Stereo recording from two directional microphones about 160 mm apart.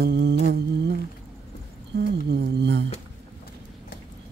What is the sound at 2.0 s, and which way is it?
Speech, 90° right.